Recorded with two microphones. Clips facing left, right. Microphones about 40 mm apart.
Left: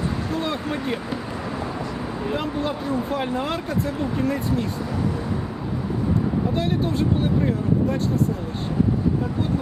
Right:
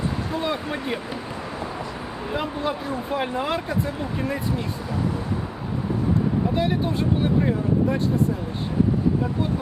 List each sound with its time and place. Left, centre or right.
0.3 s speech: centre
2.3 s speech: centre
6.5 s speech: centre